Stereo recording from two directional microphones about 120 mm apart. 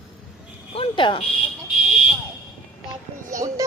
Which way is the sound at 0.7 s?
45° left (ahead or behind).